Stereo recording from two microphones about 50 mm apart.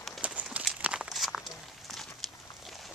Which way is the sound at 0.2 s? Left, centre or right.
Right.